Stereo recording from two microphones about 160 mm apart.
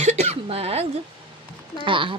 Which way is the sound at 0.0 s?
45° right (ahead or behind).